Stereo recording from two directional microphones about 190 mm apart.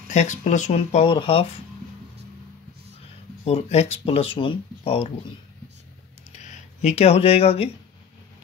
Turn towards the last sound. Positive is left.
turn(degrees=35)  # may be behind; listen again after turning